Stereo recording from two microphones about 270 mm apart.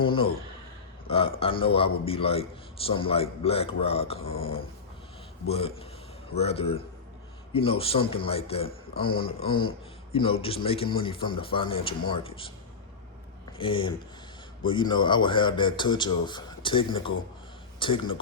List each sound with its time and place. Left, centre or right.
0.0 s a man's voice: centre
13.6 s a man's voice: centre